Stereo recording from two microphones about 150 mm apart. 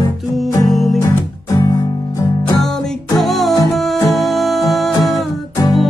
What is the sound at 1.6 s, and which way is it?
Music, 25° left (ahead or behind).